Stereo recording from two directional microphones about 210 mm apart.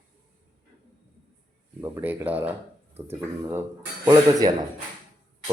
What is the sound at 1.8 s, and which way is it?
Speech, 10° right (ahead or behind).